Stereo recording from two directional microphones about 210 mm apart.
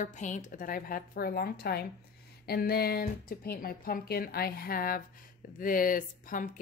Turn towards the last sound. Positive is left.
turn(degrees=40)  # may be behind; listen again after turning